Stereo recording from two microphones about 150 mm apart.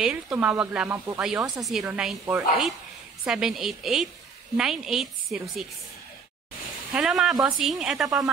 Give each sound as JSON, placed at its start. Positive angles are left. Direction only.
{"t": 0.0, "sound": "speech", "side_deg": -5}
{"t": 1.2, "sound": "a woman's voice", "side_deg": -5}
{"t": 6.9, "sound": "a woman's voice", "side_deg": -5}